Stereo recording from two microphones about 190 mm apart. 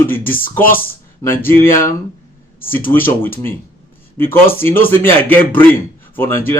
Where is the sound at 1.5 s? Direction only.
15° left (ahead or behind).